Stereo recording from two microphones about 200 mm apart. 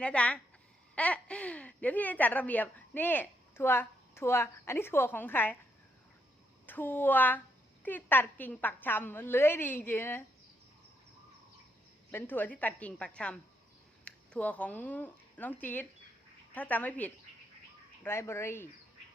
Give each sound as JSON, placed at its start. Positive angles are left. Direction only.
{"t": 0.0, "sound": "speech", "side_deg": 5}
{"t": 6.7, "sound": "speech", "side_deg": 10}
{"t": 12.1, "sound": "speech", "side_deg": 10}